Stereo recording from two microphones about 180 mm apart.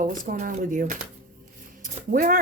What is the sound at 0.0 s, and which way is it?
A woman's voice, 45° right (ahead or behind).